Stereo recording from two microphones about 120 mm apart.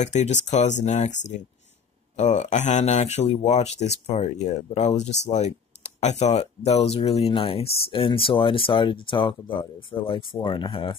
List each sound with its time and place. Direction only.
0.0 s speech: 75° left (ahead or behind); by 11.0 s 45° left (ahead or behind)